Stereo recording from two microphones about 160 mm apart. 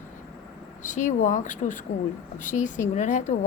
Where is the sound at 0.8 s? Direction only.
50° left (ahead or behind).